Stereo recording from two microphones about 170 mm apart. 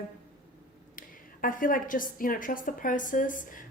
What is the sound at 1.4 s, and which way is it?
A woman's voice, 55° left (ahead or behind).